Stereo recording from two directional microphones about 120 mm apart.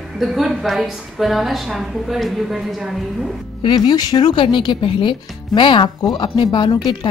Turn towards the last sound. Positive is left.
turn(degrees=40)  # may be behind; listen again after turning